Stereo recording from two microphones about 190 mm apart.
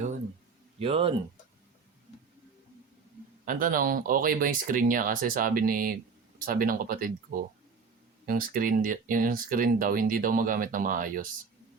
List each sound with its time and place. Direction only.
0.8 s speech: 30° right (ahead or behind)
3.4 s speech: 45° right (ahead or behind)